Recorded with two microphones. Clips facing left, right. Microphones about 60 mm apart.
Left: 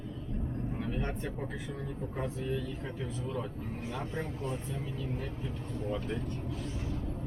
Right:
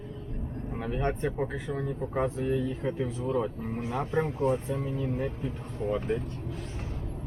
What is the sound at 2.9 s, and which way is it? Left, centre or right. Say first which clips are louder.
Speech: right 8 dB; centre.